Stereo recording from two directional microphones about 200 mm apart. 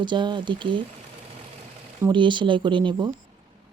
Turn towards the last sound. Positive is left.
turn(degrees=-25)  # may be behind; listen again after turning